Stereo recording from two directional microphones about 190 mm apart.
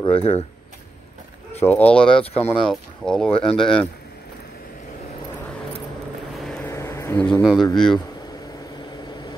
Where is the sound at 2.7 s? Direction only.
5° left (ahead or behind).